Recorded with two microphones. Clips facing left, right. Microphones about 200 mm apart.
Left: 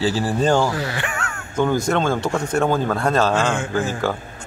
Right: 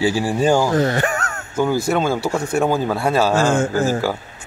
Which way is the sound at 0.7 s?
45° right (ahead or behind).